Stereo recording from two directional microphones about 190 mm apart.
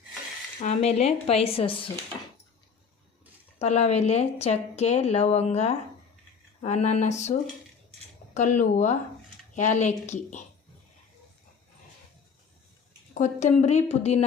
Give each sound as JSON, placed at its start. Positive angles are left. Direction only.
{"t": 0.6, "sound": "speech", "side_deg": 35}
{"t": 3.6, "sound": "speech", "side_deg": 35}
{"t": 13.1, "sound": "speech", "side_deg": 40}